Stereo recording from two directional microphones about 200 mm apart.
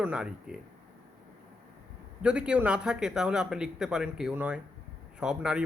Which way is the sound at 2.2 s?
5° right (ahead or behind).